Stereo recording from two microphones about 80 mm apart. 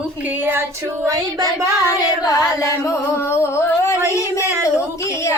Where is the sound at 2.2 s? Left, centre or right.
Left.